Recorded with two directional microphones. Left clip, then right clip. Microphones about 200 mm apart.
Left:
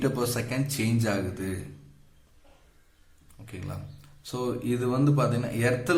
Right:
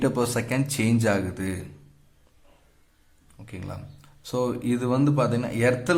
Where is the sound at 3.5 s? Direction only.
25° right (ahead or behind).